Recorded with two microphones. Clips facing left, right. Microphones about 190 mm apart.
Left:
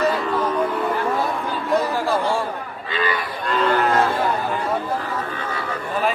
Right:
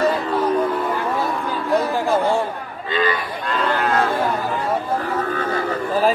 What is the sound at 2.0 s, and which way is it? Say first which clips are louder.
Chatter: right 3 dB; 20° right (ahead or behind).